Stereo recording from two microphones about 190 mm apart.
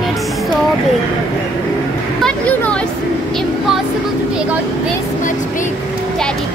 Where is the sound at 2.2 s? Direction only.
10° left (ahead or behind).